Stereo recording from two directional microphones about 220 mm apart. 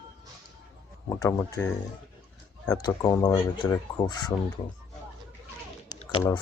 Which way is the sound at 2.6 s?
15° left (ahead or behind).